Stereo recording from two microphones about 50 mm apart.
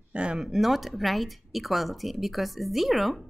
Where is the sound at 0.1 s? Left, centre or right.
Right.